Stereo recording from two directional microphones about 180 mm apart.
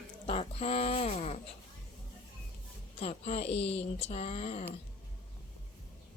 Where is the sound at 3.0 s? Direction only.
35° left (ahead or behind).